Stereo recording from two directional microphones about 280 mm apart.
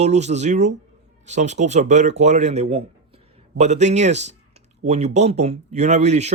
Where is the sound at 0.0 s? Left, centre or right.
Right.